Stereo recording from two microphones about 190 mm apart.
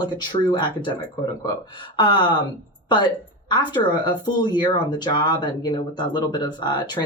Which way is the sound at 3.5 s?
25° left (ahead or behind).